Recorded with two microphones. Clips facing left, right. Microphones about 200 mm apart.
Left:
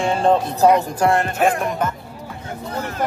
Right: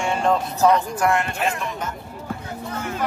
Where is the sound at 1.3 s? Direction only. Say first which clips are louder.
Left 7 dB; 50° left (ahead or behind).